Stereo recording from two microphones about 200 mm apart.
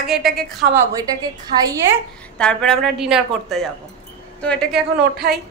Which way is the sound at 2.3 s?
5° left (ahead or behind).